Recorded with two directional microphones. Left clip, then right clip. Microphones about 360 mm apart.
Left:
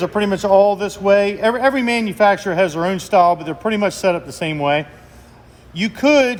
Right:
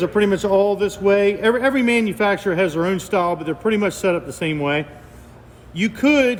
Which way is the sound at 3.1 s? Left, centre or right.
Centre.